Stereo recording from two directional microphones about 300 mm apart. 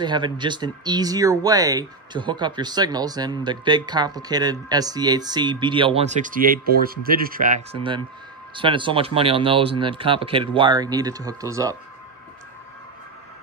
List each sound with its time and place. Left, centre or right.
0.0 s speech: centre